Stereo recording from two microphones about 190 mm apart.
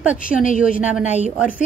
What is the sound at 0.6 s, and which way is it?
A woman's voice, 5° right (ahead or behind).